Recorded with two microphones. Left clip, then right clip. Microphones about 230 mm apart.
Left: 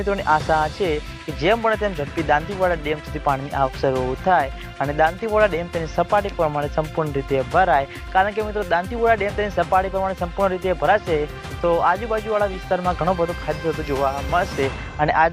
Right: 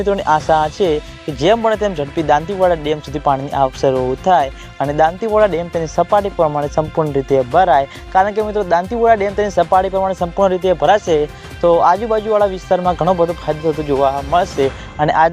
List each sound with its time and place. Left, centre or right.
0.0 s speech: right